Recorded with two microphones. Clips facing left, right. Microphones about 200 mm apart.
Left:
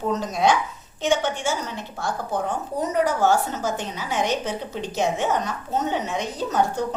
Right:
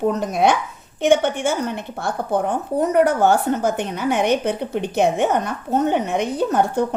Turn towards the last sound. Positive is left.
turn(degrees=-60)  # may be behind; listen again after turning